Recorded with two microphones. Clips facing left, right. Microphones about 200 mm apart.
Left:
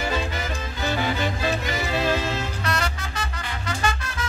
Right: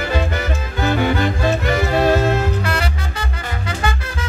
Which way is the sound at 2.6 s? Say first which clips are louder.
Right 4 dB; 30° right (ahead or behind).